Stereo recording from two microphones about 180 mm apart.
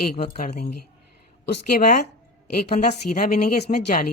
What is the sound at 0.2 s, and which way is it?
Speech, 55° left (ahead or behind).